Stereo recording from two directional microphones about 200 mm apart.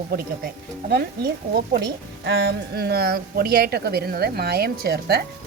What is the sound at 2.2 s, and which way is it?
Speech, 55° right (ahead or behind).